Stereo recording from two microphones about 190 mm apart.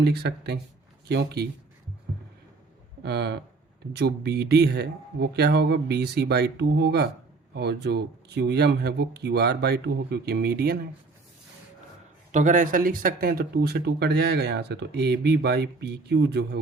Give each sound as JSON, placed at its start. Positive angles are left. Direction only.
{"t": 0.0, "sound": "speech", "side_deg": -60}
{"t": 3.0, "sound": "speech", "side_deg": -60}
{"t": 12.3, "sound": "speech", "side_deg": -40}